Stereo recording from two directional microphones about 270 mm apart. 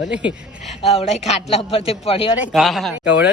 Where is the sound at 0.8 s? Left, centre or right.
Left.